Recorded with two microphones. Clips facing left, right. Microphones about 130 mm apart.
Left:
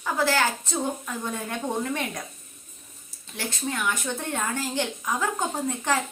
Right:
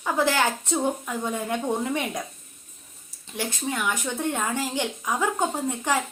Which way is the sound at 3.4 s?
15° right (ahead or behind).